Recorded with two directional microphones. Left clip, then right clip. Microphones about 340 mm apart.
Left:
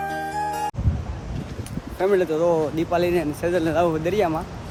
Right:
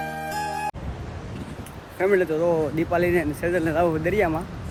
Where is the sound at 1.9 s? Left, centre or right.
Centre.